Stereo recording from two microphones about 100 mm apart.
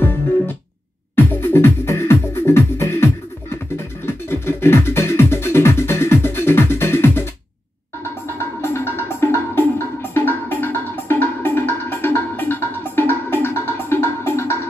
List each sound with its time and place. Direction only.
0.0 s music: 20° left (ahead or behind)
8.4 s music: 25° left (ahead or behind)